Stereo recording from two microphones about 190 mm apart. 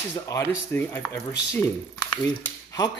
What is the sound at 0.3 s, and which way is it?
Speech, 15° left (ahead or behind).